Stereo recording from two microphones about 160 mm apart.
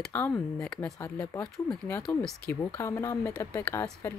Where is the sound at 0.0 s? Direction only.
15° left (ahead or behind).